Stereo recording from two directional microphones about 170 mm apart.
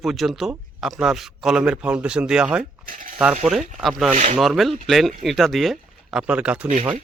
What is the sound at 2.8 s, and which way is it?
Speech, 55° right (ahead or behind).